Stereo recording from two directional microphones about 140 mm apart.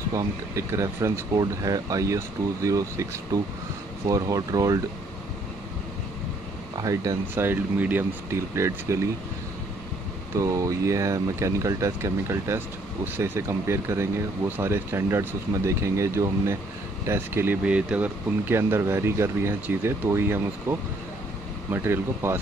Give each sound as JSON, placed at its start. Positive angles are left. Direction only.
{"t": 0.1, "sound": "speech", "side_deg": -25}
{"t": 6.8, "sound": "speech", "side_deg": -25}
{"t": 10.3, "sound": "speech", "side_deg": -20}